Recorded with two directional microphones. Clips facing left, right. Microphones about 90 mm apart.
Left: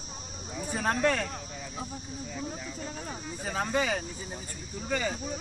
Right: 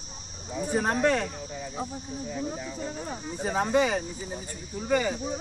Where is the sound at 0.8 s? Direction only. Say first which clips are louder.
Right 2 dB; 20° right (ahead or behind).